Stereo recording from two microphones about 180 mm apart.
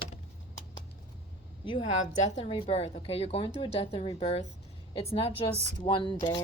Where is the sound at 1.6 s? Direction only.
30° left (ahead or behind).